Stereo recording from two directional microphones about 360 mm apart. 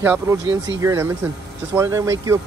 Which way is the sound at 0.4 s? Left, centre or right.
Right.